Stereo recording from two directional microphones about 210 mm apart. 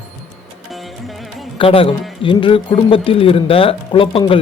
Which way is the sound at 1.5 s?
25° left (ahead or behind).